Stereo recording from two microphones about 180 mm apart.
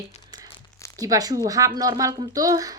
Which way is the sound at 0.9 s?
20° right (ahead or behind).